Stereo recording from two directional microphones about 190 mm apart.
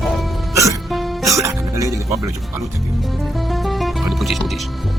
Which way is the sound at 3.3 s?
Centre (ahead or behind).